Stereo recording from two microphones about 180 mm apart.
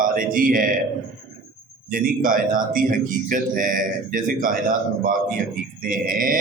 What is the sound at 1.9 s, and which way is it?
Speech, 50° right (ahead or behind).